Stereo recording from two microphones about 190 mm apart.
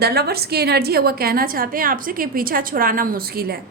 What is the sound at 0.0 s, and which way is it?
A woman's voice, 55° right (ahead or behind).